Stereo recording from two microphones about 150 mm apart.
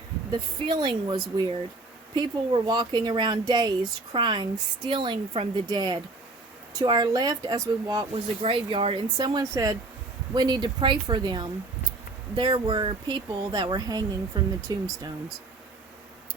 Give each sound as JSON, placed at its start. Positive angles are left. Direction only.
{"t": 0.3, "sound": "a woman's voice", "side_deg": -30}
{"t": 8.1, "sound": "a woman's voice", "side_deg": -35}